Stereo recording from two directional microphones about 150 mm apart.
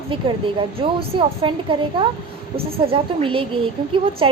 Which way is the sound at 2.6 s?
40° right (ahead or behind).